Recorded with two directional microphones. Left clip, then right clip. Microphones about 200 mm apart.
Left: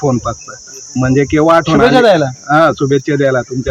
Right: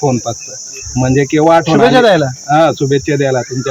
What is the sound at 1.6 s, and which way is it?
Speech, 15° right (ahead or behind).